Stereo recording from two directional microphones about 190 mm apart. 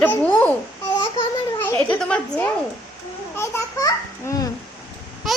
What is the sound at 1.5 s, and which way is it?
A child's voice, 10° left (ahead or behind).